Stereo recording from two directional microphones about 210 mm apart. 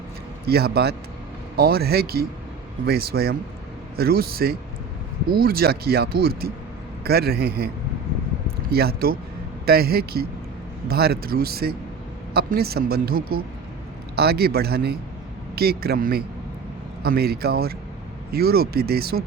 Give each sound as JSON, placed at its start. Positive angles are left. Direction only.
{"t": 0.4, "sound": "speech", "side_deg": -50}
{"t": 8.7, "sound": "speech", "side_deg": -45}